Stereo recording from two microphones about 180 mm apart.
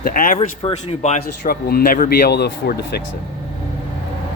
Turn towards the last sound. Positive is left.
turn(degrees=65)  # may be behind; listen again after turning